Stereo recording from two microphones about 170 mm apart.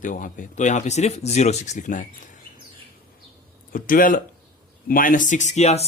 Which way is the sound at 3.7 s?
55° left (ahead or behind).